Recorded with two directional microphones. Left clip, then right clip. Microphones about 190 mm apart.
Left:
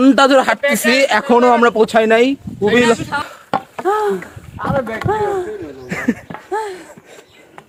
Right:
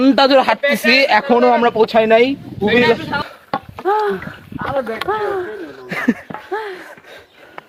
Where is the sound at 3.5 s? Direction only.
40° left (ahead or behind).